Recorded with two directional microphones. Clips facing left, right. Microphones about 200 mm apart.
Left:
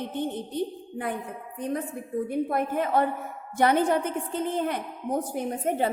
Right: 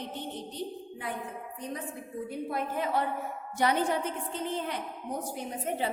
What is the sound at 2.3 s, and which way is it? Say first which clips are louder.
A woman's voice: left 6 dB; 55° left (ahead or behind).